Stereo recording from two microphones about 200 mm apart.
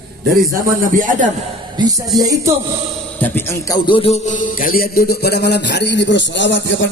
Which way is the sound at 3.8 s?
25° left (ahead or behind).